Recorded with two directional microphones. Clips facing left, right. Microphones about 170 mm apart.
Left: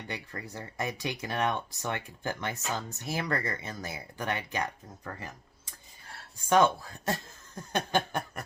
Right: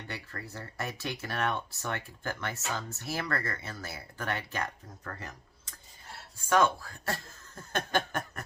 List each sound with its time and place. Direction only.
0.1 s speech: 15° left (ahead or behind)